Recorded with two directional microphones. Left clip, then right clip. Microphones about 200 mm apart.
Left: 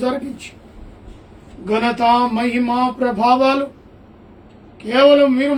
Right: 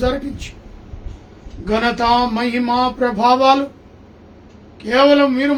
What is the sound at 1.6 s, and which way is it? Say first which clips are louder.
Speech: left 1 dB; 15° right (ahead or behind).